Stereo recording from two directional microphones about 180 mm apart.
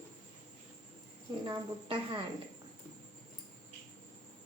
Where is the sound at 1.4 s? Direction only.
25° right (ahead or behind).